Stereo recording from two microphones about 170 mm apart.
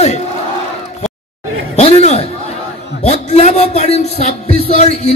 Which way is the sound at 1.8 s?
40° left (ahead or behind).